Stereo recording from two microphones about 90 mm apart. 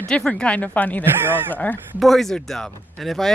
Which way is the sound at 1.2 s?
20° right (ahead or behind).